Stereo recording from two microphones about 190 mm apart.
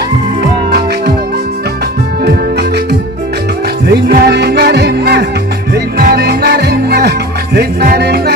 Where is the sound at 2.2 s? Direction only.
60° right (ahead or behind).